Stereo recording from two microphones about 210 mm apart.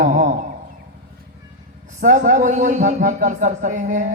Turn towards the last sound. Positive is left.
turn(degrees=-35)  # may be behind; listen again after turning